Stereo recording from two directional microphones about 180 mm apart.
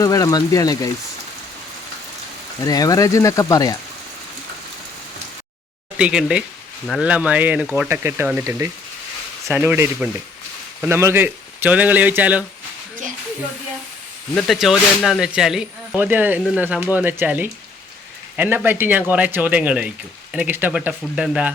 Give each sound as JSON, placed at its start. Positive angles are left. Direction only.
{"t": 0.0, "sound": "speech", "side_deg": 20}
{"t": 2.6, "sound": "speech", "side_deg": 20}
{"t": 6.0, "sound": "speech", "side_deg": -5}
{"t": 14.3, "sound": "speech", "side_deg": 0}